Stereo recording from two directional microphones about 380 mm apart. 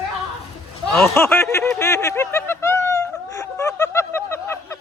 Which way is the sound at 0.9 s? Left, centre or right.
Centre.